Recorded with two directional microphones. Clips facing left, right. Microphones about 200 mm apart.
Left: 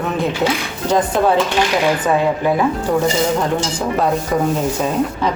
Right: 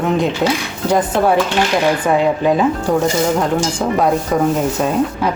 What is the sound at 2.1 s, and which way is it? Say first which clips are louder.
Speech: right 2 dB; 15° right (ahead or behind).